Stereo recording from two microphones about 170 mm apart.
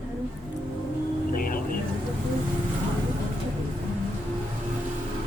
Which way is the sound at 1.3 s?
55° left (ahead or behind).